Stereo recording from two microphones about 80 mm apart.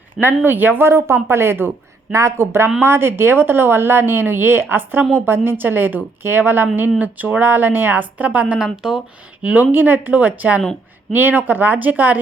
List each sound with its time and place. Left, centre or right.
0.2 s a woman's voice: right
8.5 s speech: centre
9.4 s speech: centre